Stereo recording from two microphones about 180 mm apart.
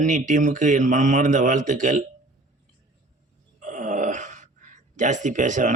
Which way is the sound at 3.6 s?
45° right (ahead or behind).